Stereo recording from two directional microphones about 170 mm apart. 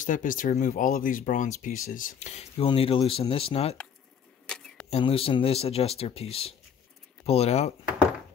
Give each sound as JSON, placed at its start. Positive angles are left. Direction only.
{"t": 0.0, "sound": "speech", "side_deg": 50}
{"t": 4.5, "sound": "camera", "side_deg": 5}
{"t": 4.8, "sound": "speech", "side_deg": 35}